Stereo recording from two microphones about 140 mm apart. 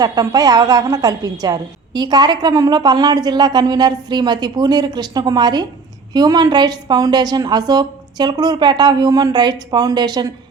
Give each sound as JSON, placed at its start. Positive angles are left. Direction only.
{"t": 0.0, "sound": "a woman's voice", "side_deg": -25}